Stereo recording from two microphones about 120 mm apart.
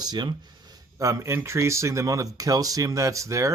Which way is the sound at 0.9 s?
25° right (ahead or behind).